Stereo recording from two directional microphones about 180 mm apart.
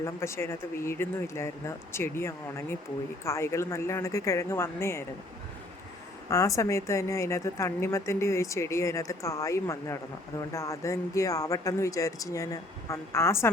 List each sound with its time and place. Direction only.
0.0 s a woman's voice: 15° left (ahead or behind)
6.3 s a woman's voice: 20° left (ahead or behind)